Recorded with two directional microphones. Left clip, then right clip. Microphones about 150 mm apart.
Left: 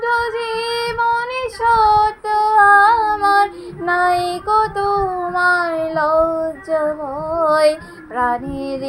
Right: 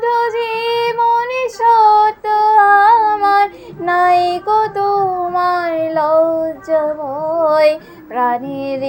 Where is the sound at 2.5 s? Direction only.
15° right (ahead or behind).